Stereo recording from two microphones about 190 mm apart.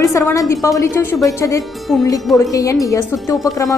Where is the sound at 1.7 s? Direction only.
Centre (ahead or behind).